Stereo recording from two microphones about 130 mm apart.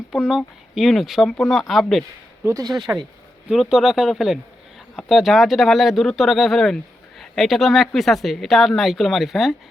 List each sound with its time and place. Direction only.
0.1 s speech: 5° right (ahead or behind)
2.4 s speech: 25° right (ahead or behind)
3.5 s speech: centre (ahead or behind)